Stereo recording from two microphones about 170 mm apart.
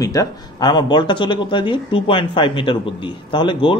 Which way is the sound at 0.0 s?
20° left (ahead or behind).